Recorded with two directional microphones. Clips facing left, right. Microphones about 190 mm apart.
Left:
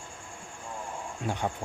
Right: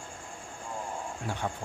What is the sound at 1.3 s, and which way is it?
Speech, 20° left (ahead or behind).